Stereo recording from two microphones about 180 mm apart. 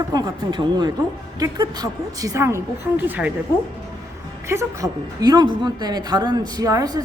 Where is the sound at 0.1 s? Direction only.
25° right (ahead or behind).